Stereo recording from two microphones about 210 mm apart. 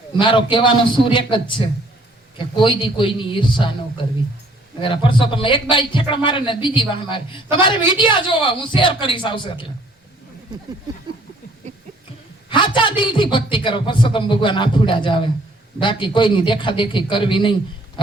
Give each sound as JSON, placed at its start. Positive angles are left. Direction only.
{"t": 0.2, "sound": "a woman's voice", "side_deg": 25}
{"t": 12.5, "sound": "a woman's voice", "side_deg": 25}